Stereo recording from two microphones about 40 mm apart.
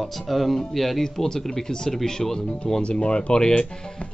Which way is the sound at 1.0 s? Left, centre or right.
Centre.